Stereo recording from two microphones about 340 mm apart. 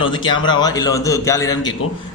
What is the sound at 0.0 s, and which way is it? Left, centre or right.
Speech, centre.